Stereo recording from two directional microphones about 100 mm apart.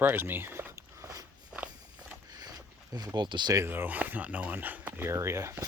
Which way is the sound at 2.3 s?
40° right (ahead or behind).